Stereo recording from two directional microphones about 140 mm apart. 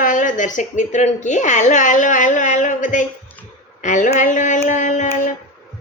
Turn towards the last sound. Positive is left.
turn(degrees=60)  # may be behind; listen again after turning